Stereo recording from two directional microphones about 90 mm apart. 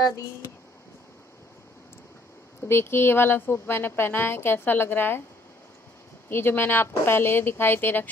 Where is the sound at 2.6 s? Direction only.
25° left (ahead or behind).